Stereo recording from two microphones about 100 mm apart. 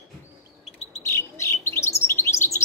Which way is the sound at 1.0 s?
30° left (ahead or behind).